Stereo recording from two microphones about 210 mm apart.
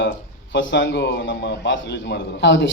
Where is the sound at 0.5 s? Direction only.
55° left (ahead or behind).